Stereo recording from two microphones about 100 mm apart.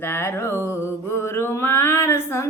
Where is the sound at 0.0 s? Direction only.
25° left (ahead or behind).